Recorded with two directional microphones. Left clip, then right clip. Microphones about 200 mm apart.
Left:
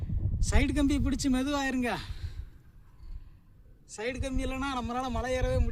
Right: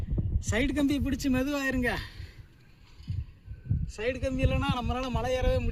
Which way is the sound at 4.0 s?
15° left (ahead or behind).